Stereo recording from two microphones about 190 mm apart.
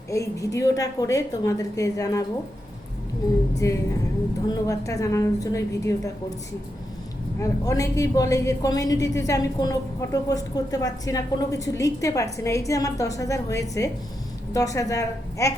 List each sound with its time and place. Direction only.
0.1 s a woman's voice: 15° left (ahead or behind)
3.6 s a woman's voice: 15° left (ahead or behind)
7.3 s a woman's voice: 15° left (ahead or behind)